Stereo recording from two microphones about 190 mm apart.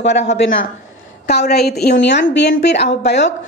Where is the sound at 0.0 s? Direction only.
65° left (ahead or behind).